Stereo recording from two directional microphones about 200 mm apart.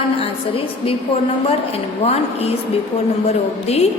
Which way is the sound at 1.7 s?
30° left (ahead or behind).